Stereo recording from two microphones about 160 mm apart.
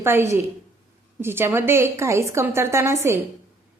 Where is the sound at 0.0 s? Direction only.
15° right (ahead or behind).